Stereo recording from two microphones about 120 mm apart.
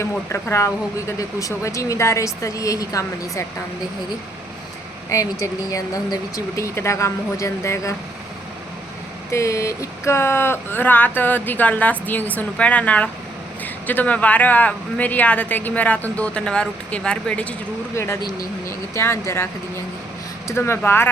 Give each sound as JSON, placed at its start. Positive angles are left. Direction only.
{"t": 0.0, "sound": "speech", "side_deg": 25}
{"t": 5.1, "sound": "speech", "side_deg": 25}
{"t": 9.3, "sound": "speech", "side_deg": 25}
{"t": 17.9, "sound": "speech", "side_deg": 20}
{"t": 20.5, "sound": "speech", "side_deg": 20}